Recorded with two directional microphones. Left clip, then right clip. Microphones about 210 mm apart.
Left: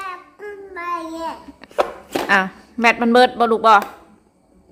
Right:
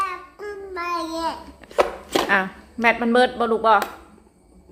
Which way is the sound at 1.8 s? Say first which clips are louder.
Right 1 dB; centre (ahead or behind).